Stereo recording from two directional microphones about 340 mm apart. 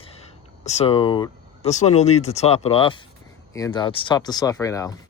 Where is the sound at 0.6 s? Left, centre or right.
Centre.